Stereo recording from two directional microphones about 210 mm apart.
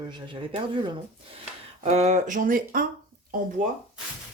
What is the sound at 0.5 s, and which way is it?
Music, 25° right (ahead or behind).